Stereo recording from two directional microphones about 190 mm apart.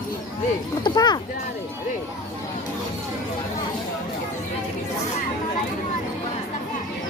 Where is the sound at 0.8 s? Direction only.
20° left (ahead or behind).